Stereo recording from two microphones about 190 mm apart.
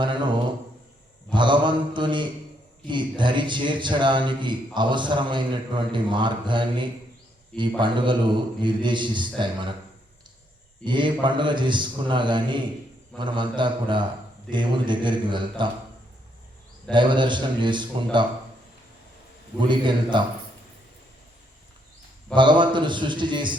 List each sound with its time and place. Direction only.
0.0 s mantra: 25° right (ahead or behind)
2.8 s a man's voice: 25° right (ahead or behind)
10.8 s a man's voice: 25° right (ahead or behind)
16.9 s a man's voice: 25° right (ahead or behind)
19.5 s a man's voice: 25° right (ahead or behind)
22.4 s a man's voice: 25° right (ahead or behind)